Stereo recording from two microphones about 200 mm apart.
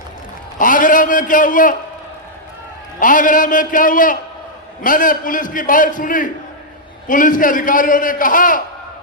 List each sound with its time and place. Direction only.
0.6 s a man's voice: 40° left (ahead or behind)
3.0 s a man's voice: 40° left (ahead or behind)